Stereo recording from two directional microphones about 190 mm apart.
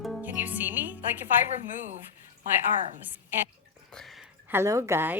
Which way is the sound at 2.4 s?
40° right (ahead or behind).